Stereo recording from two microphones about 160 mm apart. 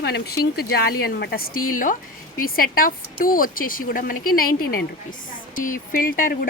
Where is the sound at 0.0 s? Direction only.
80° left.